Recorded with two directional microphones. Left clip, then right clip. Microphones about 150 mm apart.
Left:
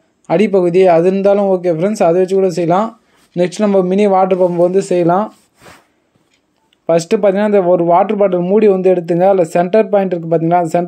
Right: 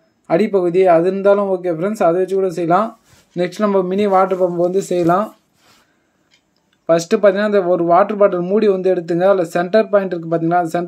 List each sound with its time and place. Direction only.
0.3 s speech: 35° left (ahead or behind)
4.6 s speech: centre (ahead or behind)
5.0 s speech: 20° left (ahead or behind)
6.9 s speech: 25° left (ahead or behind)